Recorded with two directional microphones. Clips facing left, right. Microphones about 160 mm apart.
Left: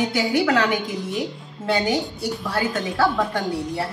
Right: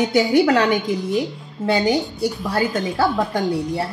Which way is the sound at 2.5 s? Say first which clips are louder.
Right 1 dB; 40° right (ahead or behind).